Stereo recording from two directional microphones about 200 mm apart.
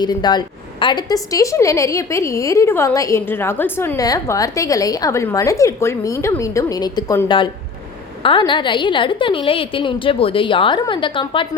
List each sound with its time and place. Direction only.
0.0 s a woman's voice: 20° left (ahead or behind)